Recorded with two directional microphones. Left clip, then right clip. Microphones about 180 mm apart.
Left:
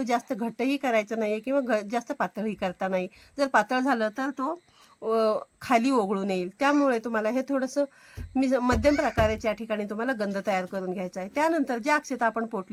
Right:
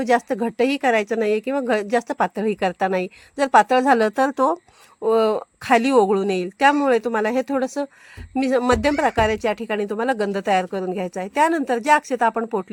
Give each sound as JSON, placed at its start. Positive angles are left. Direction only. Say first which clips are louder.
{"t": 0.0, "sound": "speech", "louder": "right 8 dB", "side_deg": -30}
{"t": 5.0, "sound": "speech", "louder": "right 6 dB", "side_deg": -30}